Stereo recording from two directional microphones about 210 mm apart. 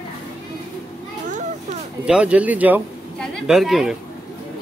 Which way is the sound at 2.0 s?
5° right (ahead or behind).